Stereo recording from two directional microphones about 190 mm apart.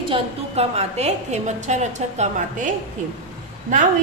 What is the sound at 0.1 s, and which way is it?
A woman's voice, 35° right (ahead or behind).